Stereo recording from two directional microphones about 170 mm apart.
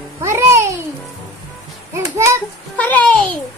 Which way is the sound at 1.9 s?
15° right (ahead or behind).